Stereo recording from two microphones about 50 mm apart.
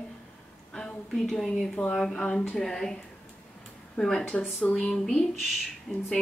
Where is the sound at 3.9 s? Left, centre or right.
Centre.